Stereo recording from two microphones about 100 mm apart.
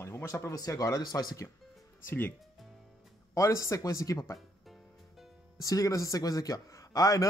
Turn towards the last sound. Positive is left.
turn(degrees=35)  # may be behind; listen again after turning